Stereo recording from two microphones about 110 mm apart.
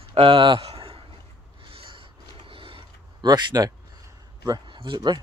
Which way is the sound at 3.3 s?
35° right (ahead or behind).